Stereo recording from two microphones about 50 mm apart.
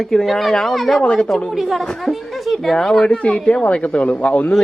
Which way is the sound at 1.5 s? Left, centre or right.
Centre.